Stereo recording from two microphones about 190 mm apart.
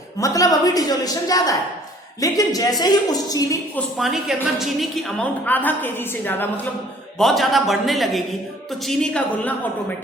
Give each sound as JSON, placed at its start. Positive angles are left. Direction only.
{"t": 0.2, "sound": "a woman's voice", "side_deg": 15}
{"t": 3.9, "sound": "a man's voice", "side_deg": 0}